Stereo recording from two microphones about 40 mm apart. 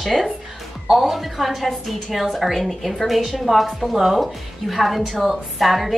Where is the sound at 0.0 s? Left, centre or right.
Centre.